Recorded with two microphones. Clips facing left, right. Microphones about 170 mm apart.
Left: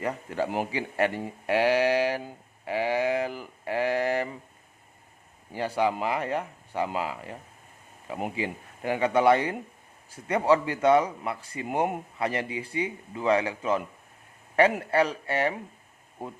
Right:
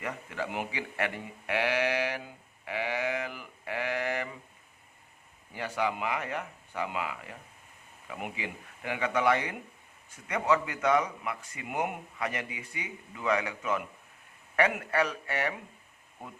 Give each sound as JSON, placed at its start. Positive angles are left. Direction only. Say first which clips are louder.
{"t": 0.0, "sound": "speech", "louder": "left 6 dB", "side_deg": 35}
{"t": 5.5, "sound": "speech", "louder": "left 5 dB", "side_deg": 35}